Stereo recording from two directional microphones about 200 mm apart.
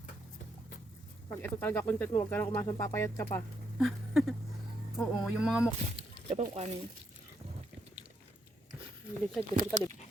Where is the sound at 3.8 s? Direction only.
Centre (ahead or behind).